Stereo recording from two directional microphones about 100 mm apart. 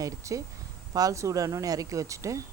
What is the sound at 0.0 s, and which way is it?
Speech, 35° right (ahead or behind).